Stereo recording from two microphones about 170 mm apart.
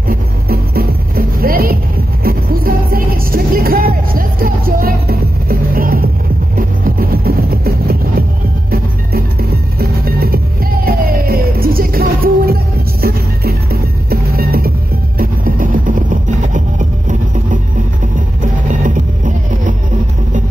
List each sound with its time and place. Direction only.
0.1 s music: 60° right (ahead or behind)
18.8 s music: 50° right (ahead or behind)